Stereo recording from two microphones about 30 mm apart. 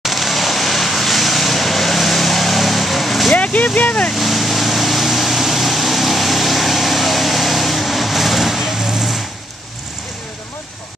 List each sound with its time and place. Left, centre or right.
0.0 s vehicle: centre
3.3 s speech: left
4.1 s vehicle: centre